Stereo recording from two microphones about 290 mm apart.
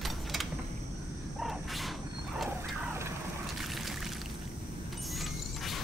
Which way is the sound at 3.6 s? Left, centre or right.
Centre.